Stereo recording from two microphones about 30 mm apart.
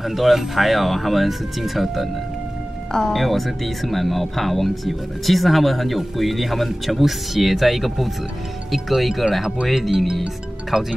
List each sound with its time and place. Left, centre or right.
0.0 s speech: centre
3.1 s speech: centre
10.7 s speech: right